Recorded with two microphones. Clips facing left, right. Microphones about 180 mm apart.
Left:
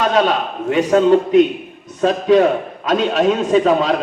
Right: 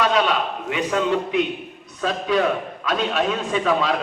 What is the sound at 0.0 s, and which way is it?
A man's voice, 45° left (ahead or behind).